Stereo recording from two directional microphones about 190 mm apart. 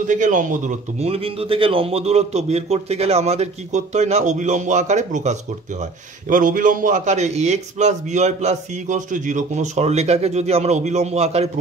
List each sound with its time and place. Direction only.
0.0 s speech: 40° right (ahead or behind)